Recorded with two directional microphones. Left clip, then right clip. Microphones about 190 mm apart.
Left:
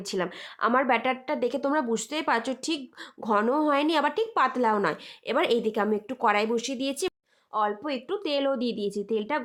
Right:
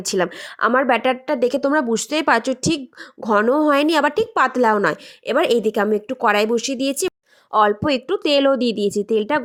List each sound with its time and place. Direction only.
0.0 s speech: 35° right (ahead or behind)
7.5 s speech: 40° right (ahead or behind)